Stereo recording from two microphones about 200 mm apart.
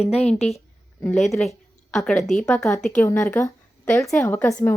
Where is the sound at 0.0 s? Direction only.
30° left (ahead or behind).